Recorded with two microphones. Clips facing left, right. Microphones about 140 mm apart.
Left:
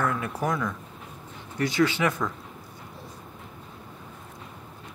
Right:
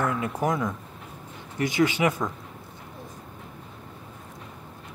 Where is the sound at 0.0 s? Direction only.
20° right (ahead or behind).